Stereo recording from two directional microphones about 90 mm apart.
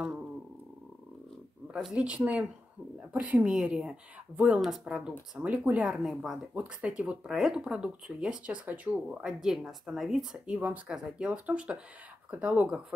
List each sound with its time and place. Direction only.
1.8 s speech: 10° right (ahead or behind)
6.5 s speech: 15° right (ahead or behind)
10.4 s speech: 15° right (ahead or behind)